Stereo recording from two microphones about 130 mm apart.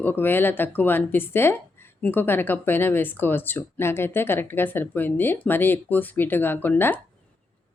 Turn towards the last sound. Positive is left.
turn(degrees=15)  # may be behind; listen again after turning